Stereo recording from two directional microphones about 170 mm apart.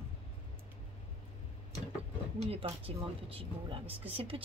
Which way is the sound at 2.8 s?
35° right (ahead or behind).